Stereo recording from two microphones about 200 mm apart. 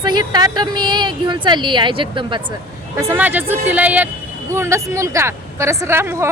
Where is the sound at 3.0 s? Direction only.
10° right (ahead or behind).